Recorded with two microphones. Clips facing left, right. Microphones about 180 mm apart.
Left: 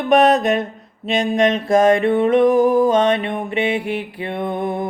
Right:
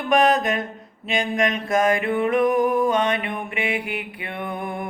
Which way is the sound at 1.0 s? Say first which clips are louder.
Left 6 dB; 30° left (ahead or behind).